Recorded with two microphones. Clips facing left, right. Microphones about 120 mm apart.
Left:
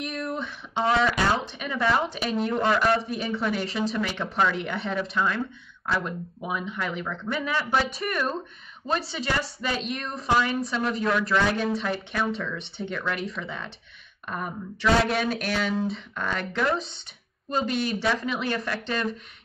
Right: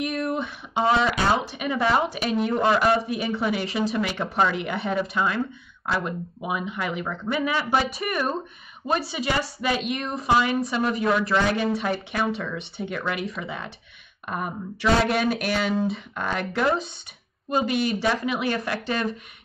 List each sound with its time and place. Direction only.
0.0 s a sound: 5° right (ahead or behind)
0.8 s speech: 25° right (ahead or behind)
1.4 s a woman's voice: 5° right (ahead or behind)
17.5 s a woman's voice: 5° right (ahead or behind)